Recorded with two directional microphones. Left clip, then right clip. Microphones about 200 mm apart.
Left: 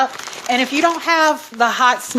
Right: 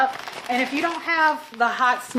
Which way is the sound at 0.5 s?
50° left (ahead or behind).